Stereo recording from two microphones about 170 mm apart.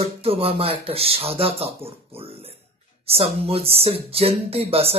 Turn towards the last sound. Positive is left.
turn(degrees=-35)  # may be behind; listen again after turning